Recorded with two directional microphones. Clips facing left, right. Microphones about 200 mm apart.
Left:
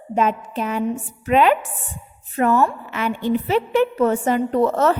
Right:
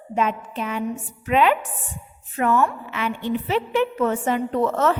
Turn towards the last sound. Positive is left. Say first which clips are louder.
# left 3 dB
turn(degrees=40)  # may be behind; listen again after turning